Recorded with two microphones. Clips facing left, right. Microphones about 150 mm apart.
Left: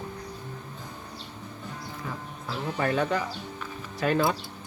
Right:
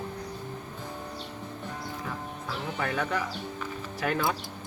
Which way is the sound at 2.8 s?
25° left (ahead or behind).